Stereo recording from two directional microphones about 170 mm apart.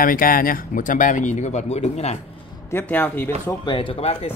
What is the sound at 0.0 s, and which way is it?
Speech, 55° left (ahead or behind).